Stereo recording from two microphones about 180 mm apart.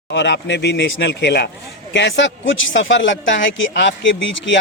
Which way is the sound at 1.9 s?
90° left.